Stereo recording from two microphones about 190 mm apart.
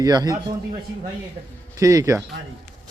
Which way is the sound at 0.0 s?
20° right (ahead or behind).